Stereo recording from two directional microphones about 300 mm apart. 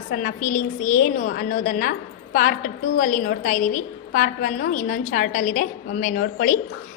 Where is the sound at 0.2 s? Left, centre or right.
Left.